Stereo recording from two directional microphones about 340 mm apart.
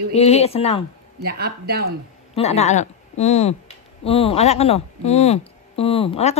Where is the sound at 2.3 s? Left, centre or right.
Centre.